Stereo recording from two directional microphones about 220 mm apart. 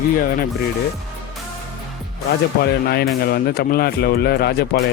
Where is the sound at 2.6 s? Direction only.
45° left (ahead or behind).